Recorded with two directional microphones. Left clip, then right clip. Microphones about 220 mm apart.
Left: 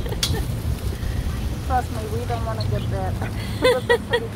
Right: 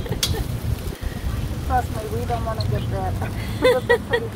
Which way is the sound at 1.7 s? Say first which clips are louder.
Right 1 dB; 30° right (ahead or behind).